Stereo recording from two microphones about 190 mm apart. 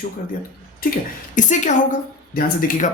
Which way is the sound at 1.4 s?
40° left (ahead or behind).